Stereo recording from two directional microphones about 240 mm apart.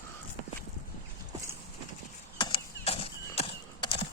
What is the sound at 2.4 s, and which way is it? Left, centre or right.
Horse, left.